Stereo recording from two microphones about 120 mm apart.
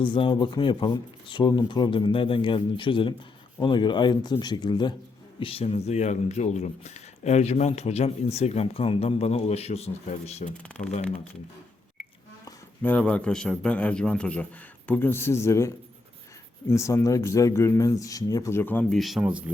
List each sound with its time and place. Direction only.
0.0 s speech: 45° left (ahead or behind)
5.4 s speech: 50° left (ahead or behind); by 10.5 s 75° left (ahead or behind)
10.8 s speech: 90° left
12.8 s a man's voice: 10° left (ahead or behind)
18.9 s speech: centre (ahead or behind)
19.2 s speech: 10° right (ahead or behind)